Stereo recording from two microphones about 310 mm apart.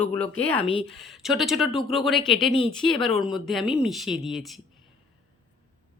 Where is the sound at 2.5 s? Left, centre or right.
Centre.